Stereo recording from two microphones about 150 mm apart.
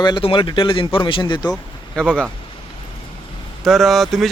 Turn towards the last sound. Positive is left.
turn(degrees=0)  # may be behind; listen again after turning